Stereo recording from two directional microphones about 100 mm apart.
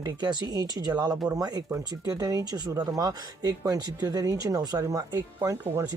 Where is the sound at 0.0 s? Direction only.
45° right (ahead or behind).